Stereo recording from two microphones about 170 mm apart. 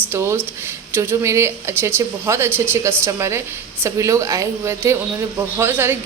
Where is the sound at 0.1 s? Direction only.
15° right (ahead or behind).